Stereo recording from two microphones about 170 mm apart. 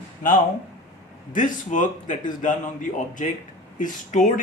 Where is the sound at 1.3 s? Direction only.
50° left (ahead or behind).